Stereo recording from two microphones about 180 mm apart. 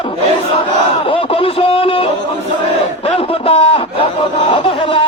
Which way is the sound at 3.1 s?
30° left (ahead or behind).